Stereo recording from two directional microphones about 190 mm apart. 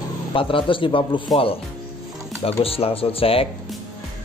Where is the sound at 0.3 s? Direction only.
25° left (ahead or behind).